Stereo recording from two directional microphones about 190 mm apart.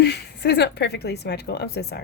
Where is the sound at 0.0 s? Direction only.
60° left (ahead or behind).